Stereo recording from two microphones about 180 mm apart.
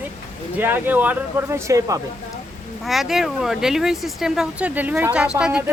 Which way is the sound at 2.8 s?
Centre (ahead or behind).